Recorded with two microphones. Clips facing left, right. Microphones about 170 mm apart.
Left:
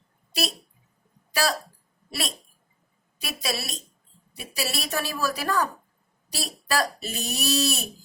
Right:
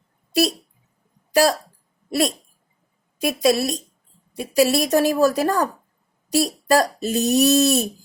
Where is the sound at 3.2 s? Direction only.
45° right (ahead or behind).